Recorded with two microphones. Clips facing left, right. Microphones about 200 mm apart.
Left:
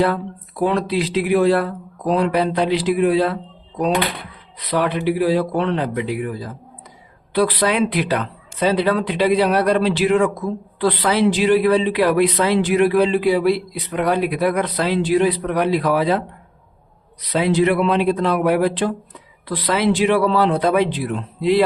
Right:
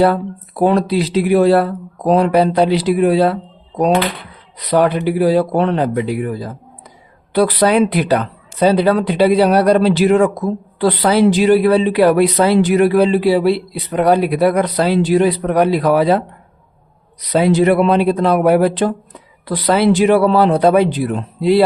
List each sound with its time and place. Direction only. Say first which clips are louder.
0.6 s speech: right 5 dB; 40° right (ahead or behind)
4.7 s speech: right 5 dB; 40° right (ahead or behind)
17.3 s speech: right 5 dB; 45° right (ahead or behind)